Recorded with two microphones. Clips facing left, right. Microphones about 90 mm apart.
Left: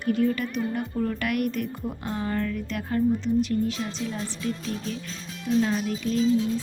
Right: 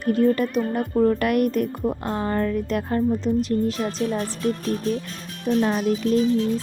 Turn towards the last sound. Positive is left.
turn(degrees=-65)  # may be behind; listen again after turning